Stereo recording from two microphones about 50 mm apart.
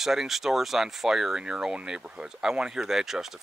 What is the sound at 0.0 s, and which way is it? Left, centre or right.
Speech, centre.